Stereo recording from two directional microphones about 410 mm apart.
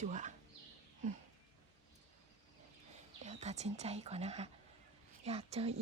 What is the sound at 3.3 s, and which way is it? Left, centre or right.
Speech, centre.